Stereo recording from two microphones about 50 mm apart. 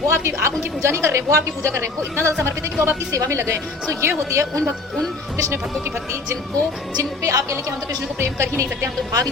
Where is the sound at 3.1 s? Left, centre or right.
Right.